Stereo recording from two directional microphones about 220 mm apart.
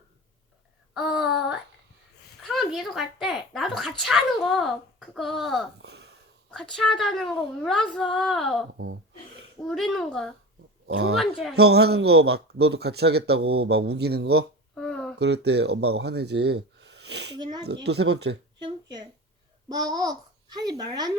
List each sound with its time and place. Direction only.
0.9 s speech: centre (ahead or behind)
5.8 s a sound: 50° right (ahead or behind)
6.5 s speech: 5° left (ahead or behind)
9.6 s speech: centre (ahead or behind)
10.8 s a man's voice: 45° right (ahead or behind)
14.8 s a sound: 5° left (ahead or behind)
15.2 s speech: 50° right (ahead or behind)
17.3 s speech: 20° right (ahead or behind)
17.8 s a man's voice: 50° right (ahead or behind)
18.6 s a sound: 20° right (ahead or behind)
19.6 s a child's voice: 15° right (ahead or behind)